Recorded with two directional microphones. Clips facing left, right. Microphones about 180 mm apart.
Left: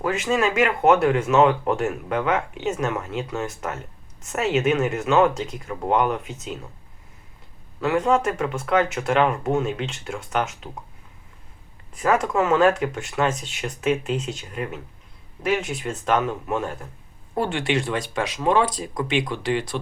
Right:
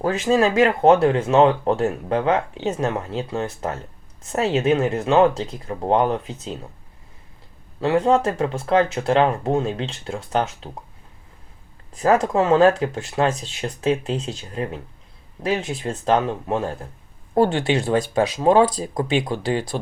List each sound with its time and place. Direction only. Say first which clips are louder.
0.0 s speech: right 4 dB; 35° right (ahead or behind)
7.8 s speech: right 3 dB; 30° right (ahead or behind)
11.9 s speech: right 3 dB; 35° right (ahead or behind)